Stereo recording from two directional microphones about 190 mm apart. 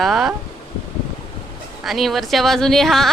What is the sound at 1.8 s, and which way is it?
Speech, centre (ahead or behind).